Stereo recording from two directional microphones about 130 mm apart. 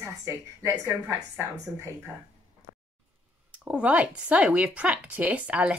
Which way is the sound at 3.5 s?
10° right (ahead or behind).